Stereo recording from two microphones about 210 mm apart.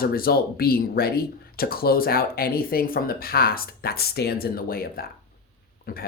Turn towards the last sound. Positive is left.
turn(degrees=45)  # may be behind; listen again after turning